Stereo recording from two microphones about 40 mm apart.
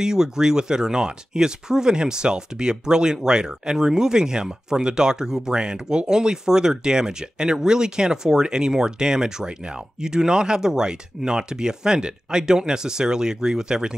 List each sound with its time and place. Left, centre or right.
0.0 s speech: centre